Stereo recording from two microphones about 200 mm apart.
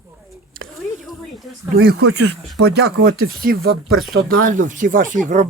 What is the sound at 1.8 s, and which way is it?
Speech, 50° right (ahead or behind).